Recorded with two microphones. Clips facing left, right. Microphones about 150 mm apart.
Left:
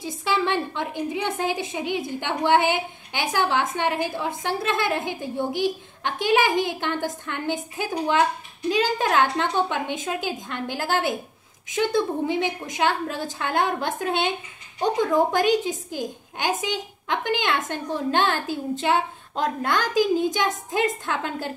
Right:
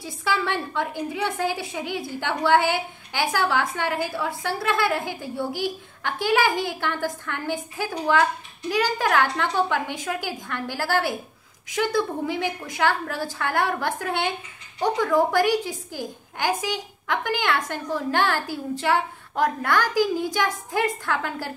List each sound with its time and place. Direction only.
0.2 s a woman's voice: 20° left (ahead or behind)